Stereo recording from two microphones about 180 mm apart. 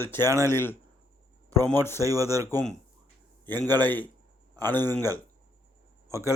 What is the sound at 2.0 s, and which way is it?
Speech, 20° right (ahead or behind).